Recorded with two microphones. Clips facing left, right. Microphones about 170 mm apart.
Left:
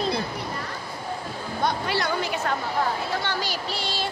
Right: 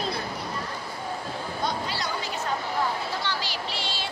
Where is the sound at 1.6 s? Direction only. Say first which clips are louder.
Left 6 dB; 60° left (ahead or behind).